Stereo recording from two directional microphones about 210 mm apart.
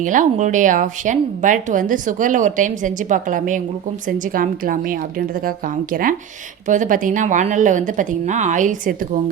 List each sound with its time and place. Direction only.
0.0 s speech: 35° right (ahead or behind)